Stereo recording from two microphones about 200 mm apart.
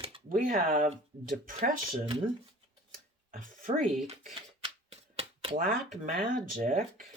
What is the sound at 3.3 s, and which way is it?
Speech, 45° right (ahead or behind).